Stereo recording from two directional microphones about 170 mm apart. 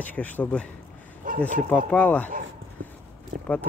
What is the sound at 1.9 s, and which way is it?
Speech, 10° left (ahead or behind).